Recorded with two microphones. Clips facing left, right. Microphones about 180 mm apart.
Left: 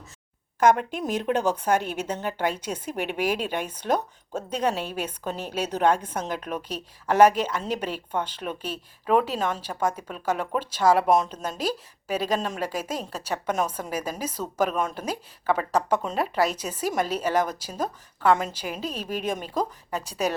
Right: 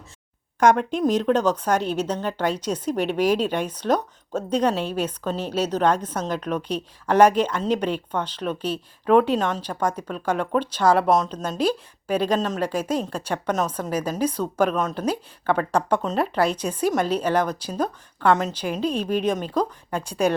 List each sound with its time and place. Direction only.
0.6 s a woman's voice: 5° left (ahead or behind)